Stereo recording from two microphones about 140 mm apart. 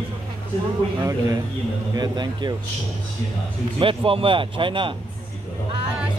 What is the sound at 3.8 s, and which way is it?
Speech, 40° right (ahead or behind).